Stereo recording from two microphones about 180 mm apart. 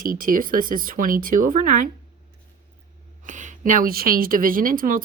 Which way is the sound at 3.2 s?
45° right (ahead or behind).